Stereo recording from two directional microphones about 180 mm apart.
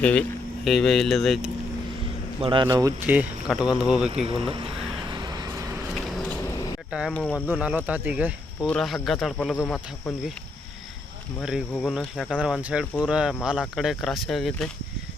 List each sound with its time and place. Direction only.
0.0 s speech: 5° left (ahead or behind)
2.4 s speech: 25° right (ahead or behind)
2.6 s speech: 15° right (ahead or behind)
5.0 s vehicle: 25° right (ahead or behind)
7.1 s speech: 5° left (ahead or behind)
7.4 s speech: 10° right (ahead or behind)
8.6 s speech: 5° left (ahead or behind)
11.4 s speech: centre (ahead or behind)